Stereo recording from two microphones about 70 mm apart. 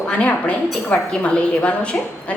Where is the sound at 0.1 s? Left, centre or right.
Centre.